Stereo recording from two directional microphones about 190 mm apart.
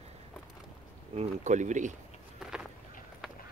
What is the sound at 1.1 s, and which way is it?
Speech, 35° right (ahead or behind).